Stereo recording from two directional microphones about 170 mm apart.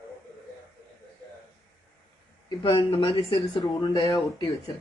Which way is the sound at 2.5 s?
35° left (ahead or behind).